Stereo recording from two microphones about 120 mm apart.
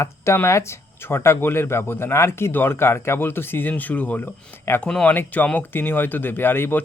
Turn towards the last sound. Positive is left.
turn(degrees=20)  # may be behind; listen again after turning